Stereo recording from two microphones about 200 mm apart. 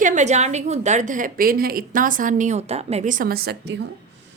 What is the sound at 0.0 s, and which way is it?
A woman's voice, 40° right (ahead or behind).